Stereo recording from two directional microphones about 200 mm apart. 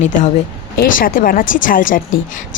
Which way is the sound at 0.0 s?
40° left (ahead or behind).